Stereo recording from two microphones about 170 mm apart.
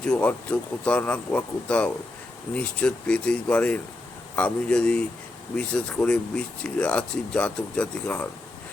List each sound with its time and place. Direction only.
0.0 s speech: 5° left (ahead or behind)